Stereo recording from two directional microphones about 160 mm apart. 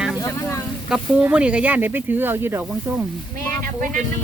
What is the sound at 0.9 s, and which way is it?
Speech, 5° right (ahead or behind).